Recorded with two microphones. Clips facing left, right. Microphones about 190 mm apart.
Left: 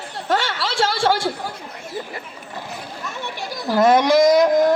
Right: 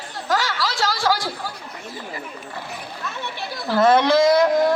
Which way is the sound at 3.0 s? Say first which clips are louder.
Even; 15° left (ahead or behind).